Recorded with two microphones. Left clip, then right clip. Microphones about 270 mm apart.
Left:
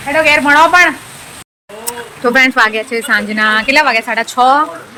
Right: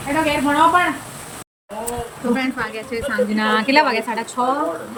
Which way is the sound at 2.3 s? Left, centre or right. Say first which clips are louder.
Left 14 dB; left.